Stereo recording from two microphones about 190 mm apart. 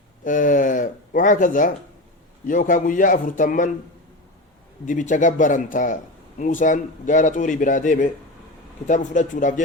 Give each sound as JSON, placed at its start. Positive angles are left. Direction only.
{"t": 0.3, "sound": "speech", "side_deg": 45}
{"t": 4.9, "sound": "speech", "side_deg": 40}